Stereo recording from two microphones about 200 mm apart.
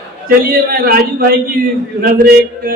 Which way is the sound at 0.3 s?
45° right (ahead or behind).